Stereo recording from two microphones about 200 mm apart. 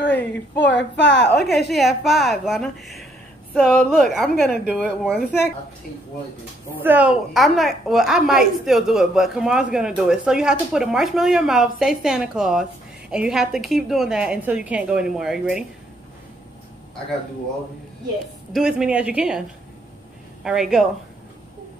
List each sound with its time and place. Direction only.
0.0 s a sound: 60° left (ahead or behind)
0.6 s speech: 60° left (ahead or behind)
1.7 s a woman's voice: centre (ahead or behind)
6.8 s a woman's voice: 10° right (ahead or behind)
18.5 s a woman's voice: 5° right (ahead or behind)
20.4 s a woman's voice: centre (ahead or behind)